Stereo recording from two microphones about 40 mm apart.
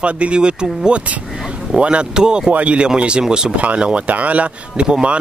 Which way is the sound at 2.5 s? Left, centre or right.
Right.